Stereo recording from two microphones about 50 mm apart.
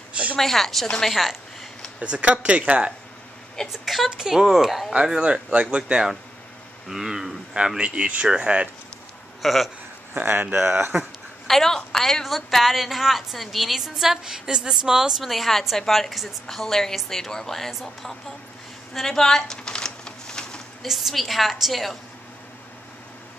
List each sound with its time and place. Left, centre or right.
0.4 s a woman's voice: centre
2.0 s speech: right
3.7 s a woman's voice: centre
4.1 s speech: centre
5.2 s speech: right; by 7.3 s centre
7.5 s speech: centre
9.4 s speech: centre
10.1 s speech: right
11.4 s a woman's voice: centre
18.9 s a sound: centre
20.8 s a woman's voice: centre